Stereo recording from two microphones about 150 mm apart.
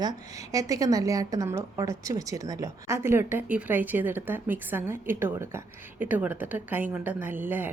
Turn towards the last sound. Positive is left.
turn(degrees=-10)  # may be behind; listen again after turning